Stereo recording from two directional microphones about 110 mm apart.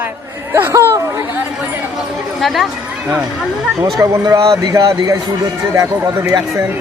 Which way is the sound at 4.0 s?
30° right (ahead or behind).